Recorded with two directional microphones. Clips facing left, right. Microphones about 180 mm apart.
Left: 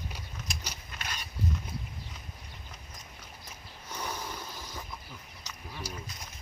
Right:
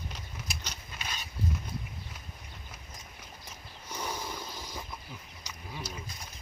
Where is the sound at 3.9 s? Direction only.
10° right (ahead or behind).